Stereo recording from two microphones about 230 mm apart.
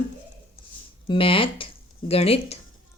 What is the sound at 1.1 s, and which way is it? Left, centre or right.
Speech, left.